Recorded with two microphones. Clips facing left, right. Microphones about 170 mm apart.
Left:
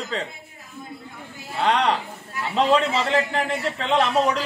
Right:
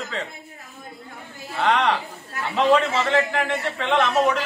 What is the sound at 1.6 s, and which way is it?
Speech, 30° left (ahead or behind).